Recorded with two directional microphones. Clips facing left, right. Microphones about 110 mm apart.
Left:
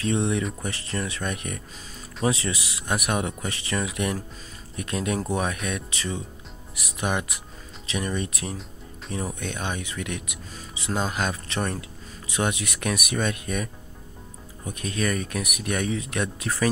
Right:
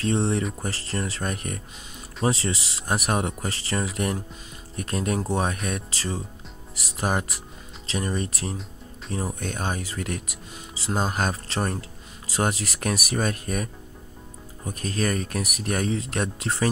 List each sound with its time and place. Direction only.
0.0 s speech: 35° right (ahead or behind)